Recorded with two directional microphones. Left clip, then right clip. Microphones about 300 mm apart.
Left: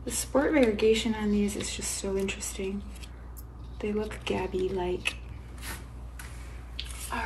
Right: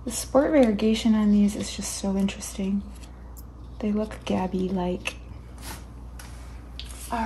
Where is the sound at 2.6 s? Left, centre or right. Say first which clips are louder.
Right 2 dB; right.